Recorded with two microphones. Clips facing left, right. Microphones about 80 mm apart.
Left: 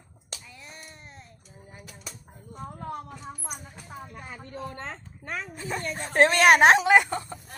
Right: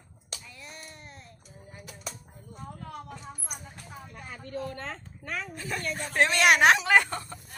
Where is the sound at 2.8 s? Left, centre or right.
Left.